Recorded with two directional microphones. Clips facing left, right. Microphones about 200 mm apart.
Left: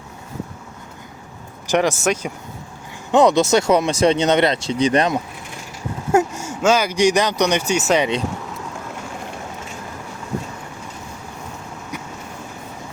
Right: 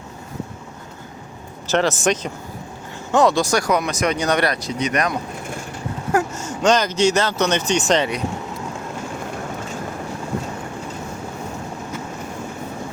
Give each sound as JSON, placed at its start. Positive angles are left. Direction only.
{"t": 1.6, "sound": "speech", "side_deg": 15}
{"t": 6.3, "sound": "speech", "side_deg": 10}